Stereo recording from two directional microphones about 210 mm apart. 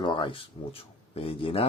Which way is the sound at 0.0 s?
25° left (ahead or behind).